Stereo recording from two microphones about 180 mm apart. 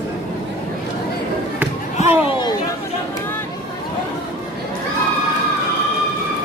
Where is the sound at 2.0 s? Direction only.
30° left (ahead or behind).